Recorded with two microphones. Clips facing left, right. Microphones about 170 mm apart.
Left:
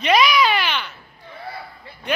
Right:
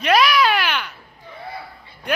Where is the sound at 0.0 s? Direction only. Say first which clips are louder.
Even; 5° right (ahead or behind).